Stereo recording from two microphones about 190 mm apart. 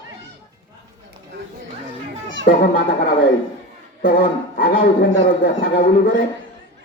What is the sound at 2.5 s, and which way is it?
Speech, 50° left (ahead or behind).